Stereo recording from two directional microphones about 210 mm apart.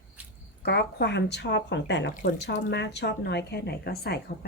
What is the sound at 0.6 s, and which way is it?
Speech, 50° left (ahead or behind).